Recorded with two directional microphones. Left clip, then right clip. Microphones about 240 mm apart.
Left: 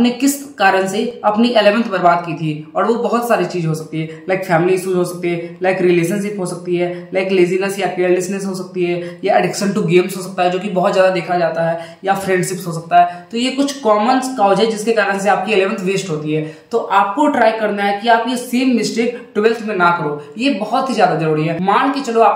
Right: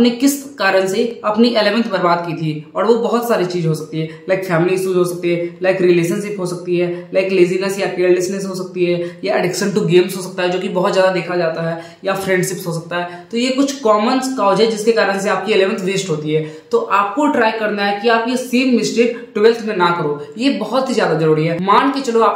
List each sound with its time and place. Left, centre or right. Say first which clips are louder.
0.0 s a woman's voice: right 1 dB; centre